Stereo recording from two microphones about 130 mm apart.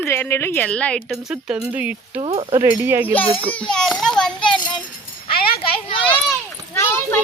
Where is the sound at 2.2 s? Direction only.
45° right (ahead or behind).